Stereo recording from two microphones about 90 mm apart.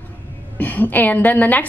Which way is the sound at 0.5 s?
20° left (ahead or behind).